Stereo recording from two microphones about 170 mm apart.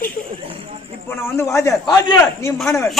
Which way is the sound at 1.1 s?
15° left (ahead or behind).